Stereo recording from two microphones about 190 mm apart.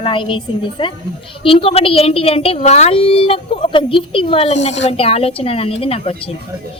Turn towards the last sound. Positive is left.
turn(degrees=30)  # may be behind; listen again after turning